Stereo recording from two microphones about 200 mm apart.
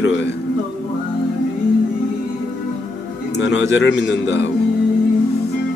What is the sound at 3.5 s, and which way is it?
Speech, 65° left (ahead or behind).